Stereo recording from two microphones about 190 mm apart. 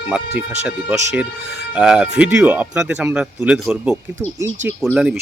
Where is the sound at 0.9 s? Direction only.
10° right (ahead or behind).